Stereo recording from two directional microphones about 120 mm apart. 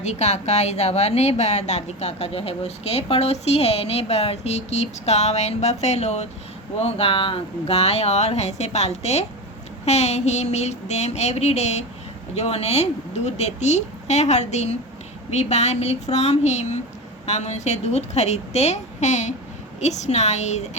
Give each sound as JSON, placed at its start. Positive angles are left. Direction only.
{"t": 0.0, "sound": "a woman's voice", "side_deg": 70}